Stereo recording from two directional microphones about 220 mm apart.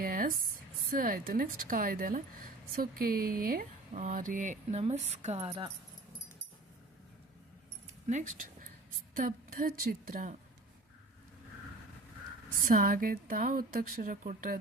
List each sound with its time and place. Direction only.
0.0 s a sound: 40° right (ahead or behind)
0.9 s speech: 40° right (ahead or behind)
8.0 s speech: 35° right (ahead or behind)
12.6 s speech: 40° right (ahead or behind)